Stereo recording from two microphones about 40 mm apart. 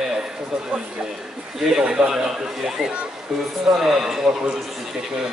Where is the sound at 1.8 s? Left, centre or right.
Right.